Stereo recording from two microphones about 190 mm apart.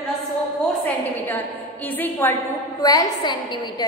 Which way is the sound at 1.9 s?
10° left (ahead or behind).